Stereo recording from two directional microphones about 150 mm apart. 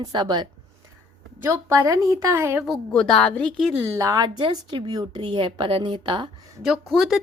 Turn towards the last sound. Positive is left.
turn(degrees=0)  # may be behind; listen again after turning